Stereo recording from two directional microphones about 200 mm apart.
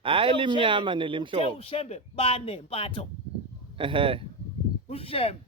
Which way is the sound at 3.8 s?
25° right (ahead or behind).